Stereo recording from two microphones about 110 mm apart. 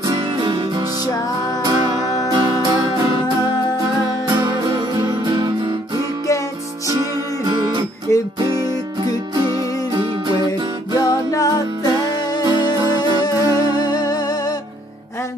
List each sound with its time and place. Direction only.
0.0 s music: 35° right (ahead or behind)
4.3 s music: 30° right (ahead or behind)
6.9 s music: 35° right (ahead or behind)
8.1 s music: 25° left (ahead or behind)
11.0 s music: 35° left (ahead or behind)
13.2 s music: 40° left (ahead or behind)